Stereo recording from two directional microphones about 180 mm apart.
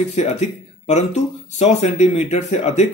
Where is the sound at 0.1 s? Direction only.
40° left (ahead or behind).